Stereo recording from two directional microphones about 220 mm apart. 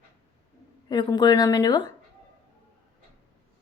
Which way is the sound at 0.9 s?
20° left (ahead or behind).